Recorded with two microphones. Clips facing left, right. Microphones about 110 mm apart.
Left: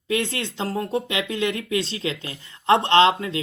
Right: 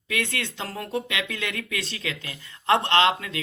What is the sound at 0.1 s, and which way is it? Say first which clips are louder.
Speech: left 4 dB; 30° left (ahead or behind).